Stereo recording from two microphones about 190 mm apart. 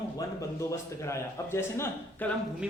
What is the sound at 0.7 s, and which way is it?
A man's voice, 15° left (ahead or behind).